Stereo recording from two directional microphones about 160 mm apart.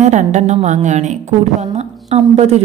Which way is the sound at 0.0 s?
45° right (ahead or behind).